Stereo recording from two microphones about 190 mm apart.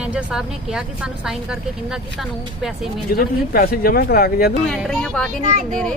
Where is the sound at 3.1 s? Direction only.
50° left (ahead or behind).